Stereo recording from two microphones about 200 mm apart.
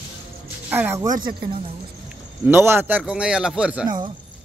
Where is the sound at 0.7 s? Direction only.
10° right (ahead or behind).